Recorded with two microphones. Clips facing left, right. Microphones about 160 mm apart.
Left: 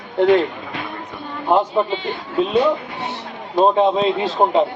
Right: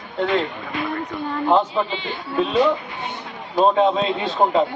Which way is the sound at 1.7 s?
45° left (ahead or behind).